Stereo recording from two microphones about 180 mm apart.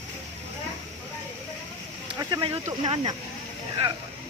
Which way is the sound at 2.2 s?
20° right (ahead or behind).